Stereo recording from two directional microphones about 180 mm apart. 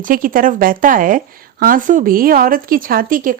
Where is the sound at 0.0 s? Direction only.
50° right (ahead or behind).